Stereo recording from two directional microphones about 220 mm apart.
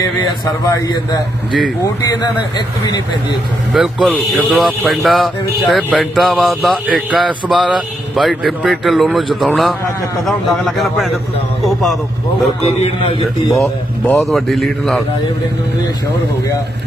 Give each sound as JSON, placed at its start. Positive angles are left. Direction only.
{"t": 0.0, "sound": "a man's voice", "side_deg": 15}
{"t": 3.7, "sound": "speech", "side_deg": 0}
{"t": 12.6, "sound": "a man's voice", "side_deg": 25}
{"t": 13.6, "sound": "speech", "side_deg": 5}